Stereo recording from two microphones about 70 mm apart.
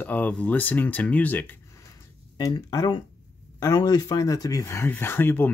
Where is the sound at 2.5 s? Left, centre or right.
Left.